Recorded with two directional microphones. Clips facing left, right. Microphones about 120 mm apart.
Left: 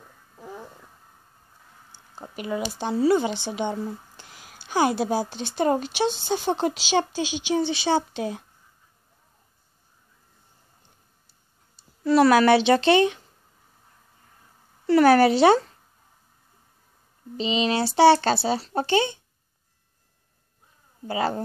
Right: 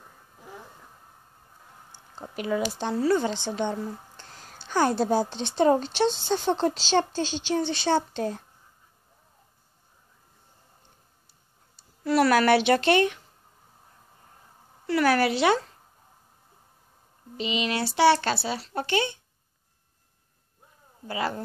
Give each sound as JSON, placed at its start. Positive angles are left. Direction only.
{"t": 2.2, "sound": "speech", "side_deg": 0}
{"t": 12.0, "sound": "a child's voice", "side_deg": 25}
{"t": 14.9, "sound": "a woman's voice", "side_deg": 30}
{"t": 17.4, "sound": "a child's voice", "side_deg": 30}
{"t": 21.1, "sound": "a child's voice", "side_deg": 30}